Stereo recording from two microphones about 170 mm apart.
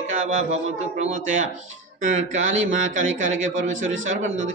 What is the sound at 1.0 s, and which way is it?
A man's voice, 45° right (ahead or behind).